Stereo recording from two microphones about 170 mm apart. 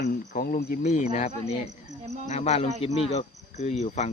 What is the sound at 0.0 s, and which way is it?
Speech, 60° left (ahead or behind).